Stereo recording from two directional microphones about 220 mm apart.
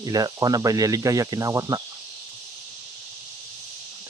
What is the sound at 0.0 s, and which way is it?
Speech, 15° right (ahead or behind).